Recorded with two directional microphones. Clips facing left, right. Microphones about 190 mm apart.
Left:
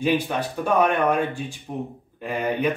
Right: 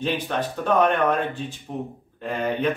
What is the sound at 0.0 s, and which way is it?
Speech, 10° left (ahead or behind).